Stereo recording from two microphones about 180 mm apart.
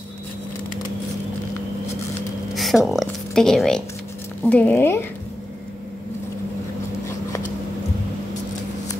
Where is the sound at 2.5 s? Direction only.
Centre (ahead or behind).